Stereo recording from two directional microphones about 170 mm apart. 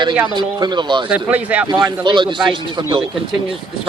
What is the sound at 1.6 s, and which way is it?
A man's voice, 25° right (ahead or behind).